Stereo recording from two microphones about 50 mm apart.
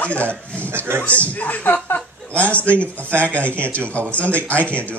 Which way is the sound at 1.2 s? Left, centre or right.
Left.